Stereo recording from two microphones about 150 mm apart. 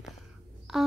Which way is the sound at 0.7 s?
Centre (ahead or behind).